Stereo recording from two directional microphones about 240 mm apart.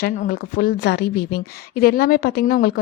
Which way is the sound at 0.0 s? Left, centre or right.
Left.